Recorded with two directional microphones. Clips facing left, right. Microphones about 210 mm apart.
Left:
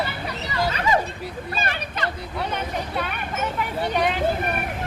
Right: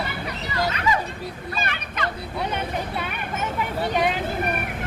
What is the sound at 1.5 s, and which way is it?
Speech, 35° left (ahead or behind).